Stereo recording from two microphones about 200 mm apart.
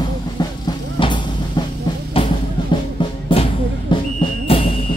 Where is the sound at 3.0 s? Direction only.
25° left (ahead or behind).